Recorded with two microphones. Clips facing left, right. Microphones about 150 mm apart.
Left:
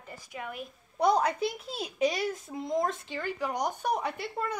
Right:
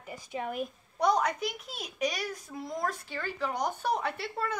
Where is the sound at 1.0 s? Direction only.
30° left (ahead or behind).